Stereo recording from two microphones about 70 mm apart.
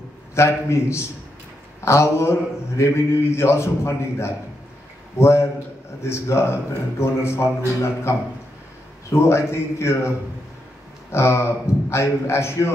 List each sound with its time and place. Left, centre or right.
0.3 s a man's voice: left